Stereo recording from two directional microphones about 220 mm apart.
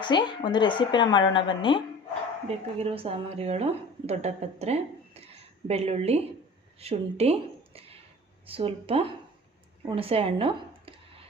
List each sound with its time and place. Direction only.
0.0 s speech: 20° left (ahead or behind)
2.7 s a woman's voice: 25° right (ahead or behind)
9.8 s a sound: 25° right (ahead or behind)